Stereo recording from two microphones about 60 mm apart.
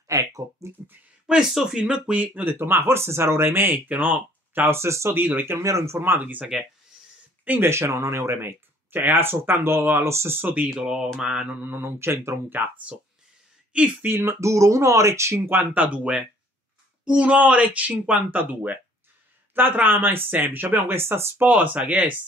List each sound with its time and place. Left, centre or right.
0.1 s a sound: right
1.2 s speech: centre
1.8 s speech: centre
2.6 s speech: right
4.7 s speech: right
5.1 s speech: right
5.6 s speech: right
5.9 s speech: right
7.6 s speech: right
10.8 s speech: centre
11.5 s speech: right
14.0 s speech: right
14.4 s speech: right
15.7 s speech: right